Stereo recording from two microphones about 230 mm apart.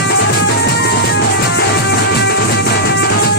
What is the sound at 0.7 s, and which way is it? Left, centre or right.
Music, left.